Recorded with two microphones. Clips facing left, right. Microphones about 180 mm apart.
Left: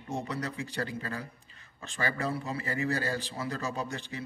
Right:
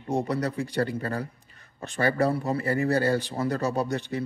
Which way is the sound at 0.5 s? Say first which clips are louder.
Right 8 dB; 55° right (ahead or behind).